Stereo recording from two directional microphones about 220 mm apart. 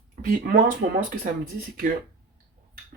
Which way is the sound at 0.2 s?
45° right (ahead or behind).